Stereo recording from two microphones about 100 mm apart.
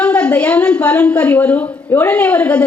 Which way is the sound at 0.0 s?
10° left (ahead or behind).